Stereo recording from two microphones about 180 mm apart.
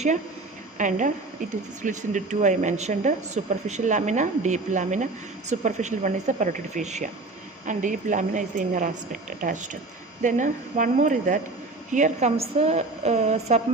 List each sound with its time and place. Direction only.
0.8 s a woman's voice: 45° right (ahead or behind)
10.2 s a woman's voice: 45° right (ahead or behind)